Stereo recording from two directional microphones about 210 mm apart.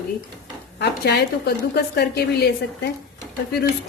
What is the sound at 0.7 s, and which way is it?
A woman's voice, 50° left (ahead or behind).